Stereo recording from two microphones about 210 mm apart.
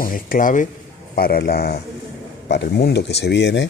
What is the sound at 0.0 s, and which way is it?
A man's voice, 40° left (ahead or behind).